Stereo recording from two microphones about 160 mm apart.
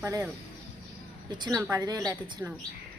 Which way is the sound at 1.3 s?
25° right (ahead or behind).